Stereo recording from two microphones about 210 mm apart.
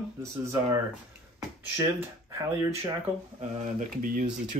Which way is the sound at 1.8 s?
15° right (ahead or behind).